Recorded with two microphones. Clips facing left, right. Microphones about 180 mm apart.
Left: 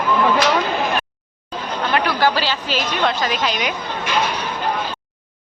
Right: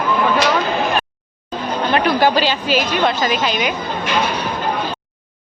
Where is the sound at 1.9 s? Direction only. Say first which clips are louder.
Right 3 dB; 20° right (ahead or behind).